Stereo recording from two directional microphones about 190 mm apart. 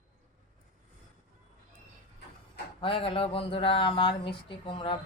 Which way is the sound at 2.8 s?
25° left (ahead or behind).